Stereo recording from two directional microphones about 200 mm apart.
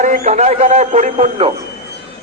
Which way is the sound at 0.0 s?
40° right (ahead or behind).